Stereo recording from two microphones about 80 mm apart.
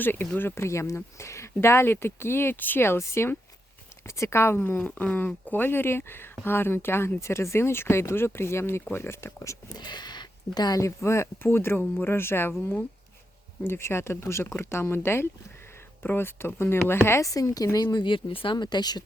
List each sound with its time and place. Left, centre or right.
0.0 s speech: left
9.7 s speech: left
10.8 s speech: left
13.7 s speech: left
17.8 s speech: left